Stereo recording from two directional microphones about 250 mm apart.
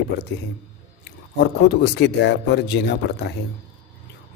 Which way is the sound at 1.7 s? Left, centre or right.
Left.